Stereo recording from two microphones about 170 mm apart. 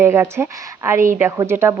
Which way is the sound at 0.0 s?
15° right (ahead or behind).